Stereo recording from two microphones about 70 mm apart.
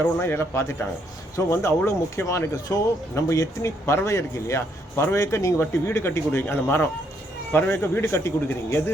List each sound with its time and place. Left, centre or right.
0.0 s a man's voice: left
3.8 s a man's voice: left